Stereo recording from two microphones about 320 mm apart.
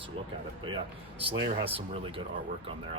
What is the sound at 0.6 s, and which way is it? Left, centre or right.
Speech, centre.